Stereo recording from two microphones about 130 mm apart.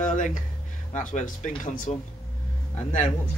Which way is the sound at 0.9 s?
70° left (ahead or behind).